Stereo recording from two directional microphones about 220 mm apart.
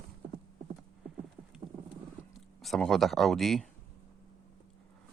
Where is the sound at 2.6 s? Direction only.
Centre (ahead or behind).